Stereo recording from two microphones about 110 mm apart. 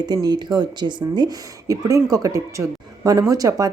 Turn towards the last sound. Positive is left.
turn(degrees=-30)  # may be behind; listen again after turning